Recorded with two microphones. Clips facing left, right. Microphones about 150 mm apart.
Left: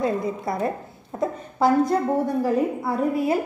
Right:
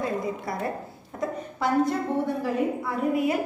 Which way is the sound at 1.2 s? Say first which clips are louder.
Left 6 dB; 35° left (ahead or behind).